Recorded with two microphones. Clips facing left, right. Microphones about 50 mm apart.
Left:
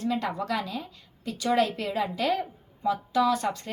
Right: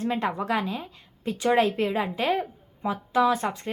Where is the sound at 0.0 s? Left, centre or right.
Right.